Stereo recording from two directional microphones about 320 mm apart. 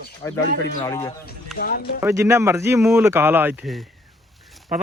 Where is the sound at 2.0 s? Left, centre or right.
Centre.